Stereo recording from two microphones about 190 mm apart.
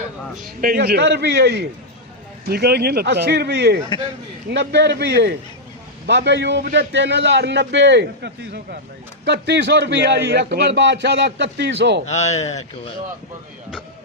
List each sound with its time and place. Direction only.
0.6 s a man's voice: 50° right (ahead or behind)
12.0 s speech: 35° left (ahead or behind)